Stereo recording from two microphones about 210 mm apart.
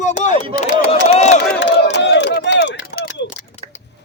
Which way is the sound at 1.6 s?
55° left (ahead or behind).